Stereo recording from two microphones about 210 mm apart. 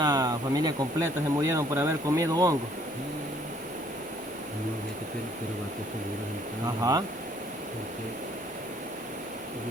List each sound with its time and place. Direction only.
0.0 s speech: 15° right (ahead or behind)